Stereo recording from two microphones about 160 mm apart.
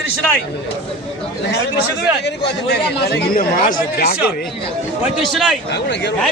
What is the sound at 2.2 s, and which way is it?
Speech, 90° left.